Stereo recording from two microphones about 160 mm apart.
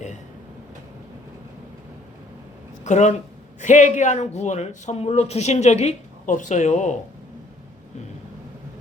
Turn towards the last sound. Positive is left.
turn(degrees=50)  # may be behind; listen again after turning